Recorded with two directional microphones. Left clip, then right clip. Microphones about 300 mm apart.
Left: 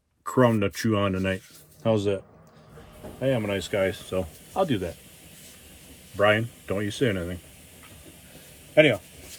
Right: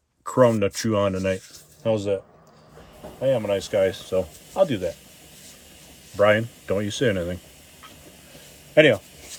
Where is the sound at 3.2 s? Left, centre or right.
Centre.